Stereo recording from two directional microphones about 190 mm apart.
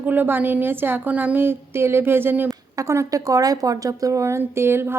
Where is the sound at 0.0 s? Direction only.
10° right (ahead or behind).